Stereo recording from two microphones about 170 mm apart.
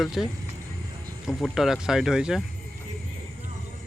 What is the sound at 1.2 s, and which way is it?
Speech, centre (ahead or behind).